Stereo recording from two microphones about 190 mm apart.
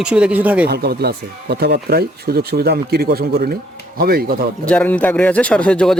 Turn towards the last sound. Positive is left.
turn(degrees=5)  # may be behind; listen again after turning